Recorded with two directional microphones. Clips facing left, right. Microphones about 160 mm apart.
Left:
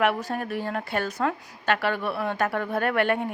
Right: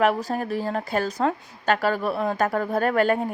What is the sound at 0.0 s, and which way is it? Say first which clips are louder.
A woman's voice: right 3 dB; 35° right (ahead or behind).